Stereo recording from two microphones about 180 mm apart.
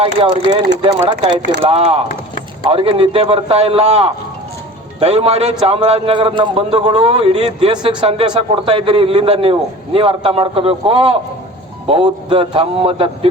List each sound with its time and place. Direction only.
0.0 s a man's voice: 30° right (ahead or behind)